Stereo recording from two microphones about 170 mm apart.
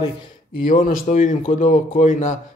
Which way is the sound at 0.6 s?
50° left (ahead or behind).